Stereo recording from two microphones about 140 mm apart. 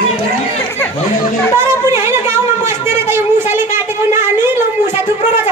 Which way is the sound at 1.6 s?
20° right (ahead or behind).